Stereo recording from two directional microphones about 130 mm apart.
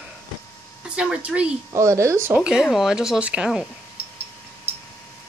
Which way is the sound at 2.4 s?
5° right (ahead or behind).